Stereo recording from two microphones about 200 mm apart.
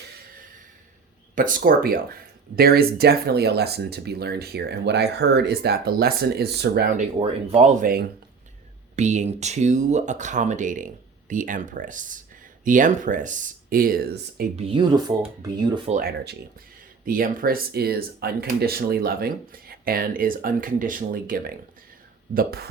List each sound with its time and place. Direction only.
1.4 s speech: 40° right (ahead or behind)
7.2 s speech: 30° right (ahead or behind); by 14.4 s 50° right (ahead or behind)
14.5 s speech: 30° right (ahead or behind)
15.9 s speech: 45° right (ahead or behind)